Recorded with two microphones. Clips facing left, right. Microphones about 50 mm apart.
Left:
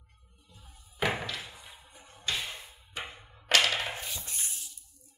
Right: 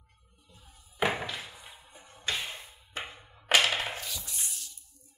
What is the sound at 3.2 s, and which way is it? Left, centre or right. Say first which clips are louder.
Music: even; centre.